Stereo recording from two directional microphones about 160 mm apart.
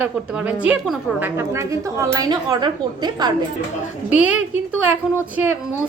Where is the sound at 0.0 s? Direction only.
10° right (ahead or behind); by 3.3 s 25° right (ahead or behind).